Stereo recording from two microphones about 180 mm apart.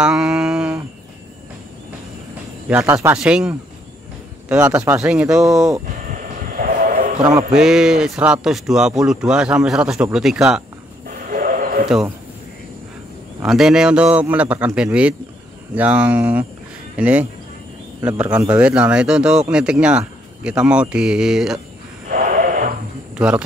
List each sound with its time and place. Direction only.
0.0 s a sound: 5° right (ahead or behind)
2.7 s speech: 5° right (ahead or behind)
6.1 s vehicle: 50° right (ahead or behind)
7.5 s speech: 5° right (ahead or behind)
11.1 s a sound: 50° right (ahead or behind)
13.4 s speech: centre (ahead or behind)
22.1 s music: 50° right (ahead or behind)
23.1 s speech: 5° right (ahead or behind)